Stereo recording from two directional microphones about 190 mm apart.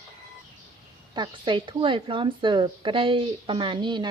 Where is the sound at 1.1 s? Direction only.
25° right (ahead or behind).